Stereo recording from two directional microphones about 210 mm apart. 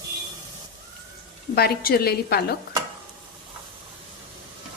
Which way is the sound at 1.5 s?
45° left (ahead or behind).